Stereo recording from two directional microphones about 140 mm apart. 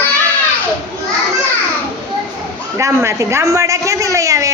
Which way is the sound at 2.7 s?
20° right (ahead or behind).